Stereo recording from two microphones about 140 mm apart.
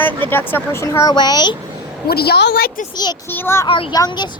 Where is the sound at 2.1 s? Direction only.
90° left.